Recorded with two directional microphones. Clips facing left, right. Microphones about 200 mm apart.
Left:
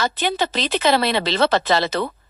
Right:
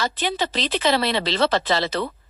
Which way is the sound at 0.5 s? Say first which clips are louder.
Left 2 dB; 50° left (ahead or behind).